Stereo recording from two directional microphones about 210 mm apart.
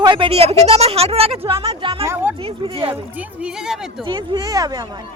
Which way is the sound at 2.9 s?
5° right (ahead or behind).